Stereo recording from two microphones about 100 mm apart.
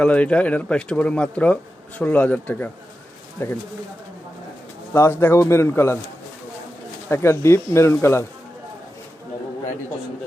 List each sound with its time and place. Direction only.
0.0 s speech: 10° left (ahead or behind)
3.4 s speech: 25° left (ahead or behind)
4.9 s speech: 25° left (ahead or behind)
7.1 s speech: 25° left (ahead or behind)